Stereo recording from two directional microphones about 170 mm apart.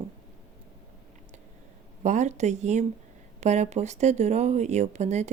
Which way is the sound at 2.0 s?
45° right (ahead or behind).